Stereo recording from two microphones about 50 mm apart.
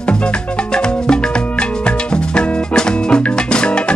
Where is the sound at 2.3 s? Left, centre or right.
Centre.